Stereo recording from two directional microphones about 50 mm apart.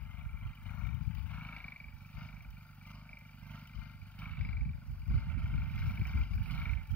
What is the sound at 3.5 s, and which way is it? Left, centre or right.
Vehicle, left.